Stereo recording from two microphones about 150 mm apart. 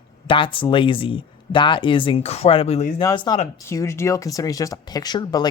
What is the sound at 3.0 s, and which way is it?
Speech, 30° left (ahead or behind).